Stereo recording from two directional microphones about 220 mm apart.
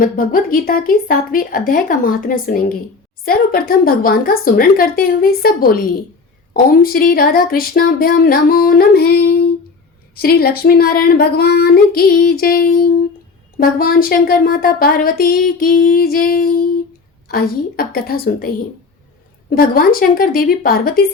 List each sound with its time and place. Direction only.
0.0 s speech: 40° left (ahead or behind)